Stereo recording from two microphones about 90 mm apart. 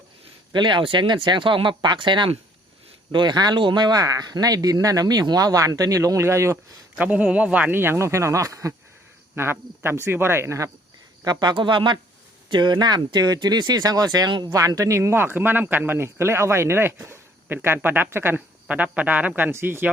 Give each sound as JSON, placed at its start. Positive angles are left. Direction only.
{"t": 0.5, "sound": "speech", "side_deg": -60}
{"t": 7.0, "sound": "speech", "side_deg": -15}
{"t": 9.3, "sound": "speech", "side_deg": -25}
{"t": 11.2, "sound": "speech", "side_deg": -50}
{"t": 14.5, "sound": "speech", "side_deg": -40}